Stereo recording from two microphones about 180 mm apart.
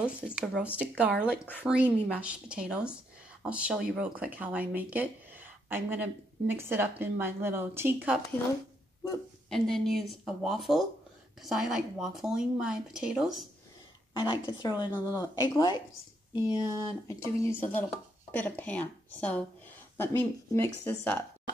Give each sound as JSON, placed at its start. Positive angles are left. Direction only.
{"t": 0.0, "sound": "speech", "side_deg": -5}
{"t": 9.5, "sound": "speech", "side_deg": 0}
{"t": 14.1, "sound": "a woman's voice", "side_deg": 25}
{"t": 16.6, "sound": "speech", "side_deg": -20}
{"t": 17.1, "sound": "speech", "side_deg": 15}